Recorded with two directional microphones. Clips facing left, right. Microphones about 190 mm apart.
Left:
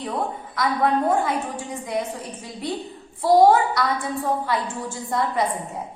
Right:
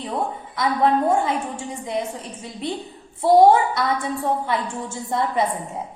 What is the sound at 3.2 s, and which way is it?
A woman's voice, 25° right (ahead or behind).